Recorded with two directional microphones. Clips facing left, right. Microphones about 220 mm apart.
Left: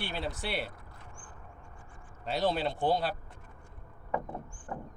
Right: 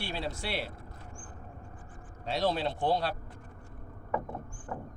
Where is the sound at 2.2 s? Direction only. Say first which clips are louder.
Even; centre (ahead or behind).